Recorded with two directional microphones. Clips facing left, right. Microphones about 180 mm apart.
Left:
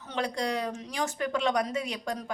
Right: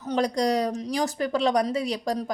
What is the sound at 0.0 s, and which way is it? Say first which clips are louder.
A woman's voice: right 7 dB; 40° right (ahead or behind).